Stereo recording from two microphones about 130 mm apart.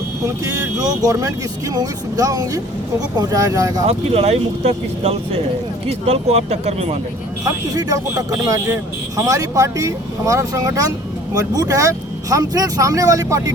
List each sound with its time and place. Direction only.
0.4 s speech: 25° right (ahead or behind)
3.8 s speech: 50° right (ahead or behind)
7.4 s speech: 25° right (ahead or behind)